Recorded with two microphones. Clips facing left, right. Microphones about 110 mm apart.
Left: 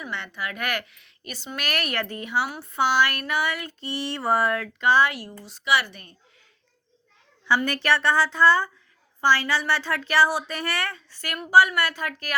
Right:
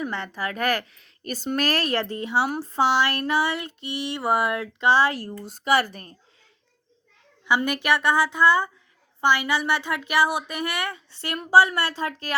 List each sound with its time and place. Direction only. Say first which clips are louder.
0.0 s a woman's voice: right 4 dB; 35° right (ahead or behind)
5.4 s speech: right 2 dB; 50° right (ahead or behind)
7.4 s a woman's voice: even; 15° right (ahead or behind)